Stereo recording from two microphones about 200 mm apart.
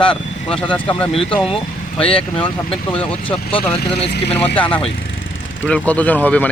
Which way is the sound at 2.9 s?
5° left (ahead or behind).